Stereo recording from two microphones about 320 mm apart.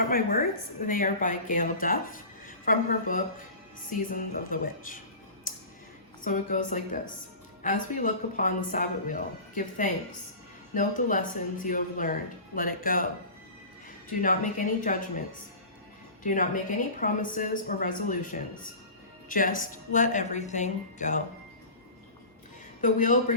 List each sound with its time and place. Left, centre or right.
0.1 s a woman's voice: left
5.5 s a sound: left
6.2 s a woman's voice: left
14.1 s a woman's voice: left
16.2 s a woman's voice: left
22.8 s a woman's voice: left